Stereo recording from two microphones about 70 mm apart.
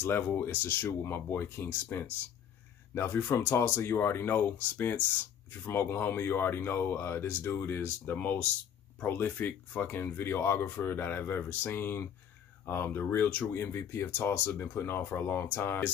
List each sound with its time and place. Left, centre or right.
0.0 s speech: left
13.6 s speech: left